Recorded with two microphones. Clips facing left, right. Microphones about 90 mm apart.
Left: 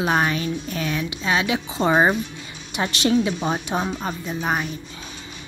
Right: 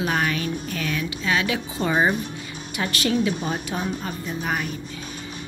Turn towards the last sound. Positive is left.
turn(degrees=25)  # may be behind; listen again after turning